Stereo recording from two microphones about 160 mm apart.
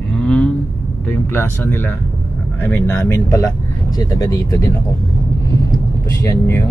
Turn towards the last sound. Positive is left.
turn(degrees=15)  # may be behind; listen again after turning